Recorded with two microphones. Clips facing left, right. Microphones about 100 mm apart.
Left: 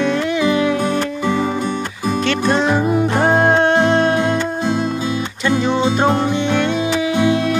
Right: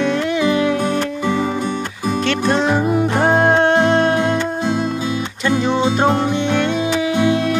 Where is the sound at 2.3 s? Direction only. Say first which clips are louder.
Even; 50° right (ahead or behind).